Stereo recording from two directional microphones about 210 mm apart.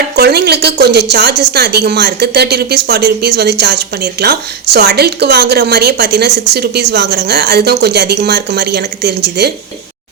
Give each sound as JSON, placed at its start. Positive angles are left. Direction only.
{"t": 0.2, "sound": "a woman's voice", "side_deg": -50}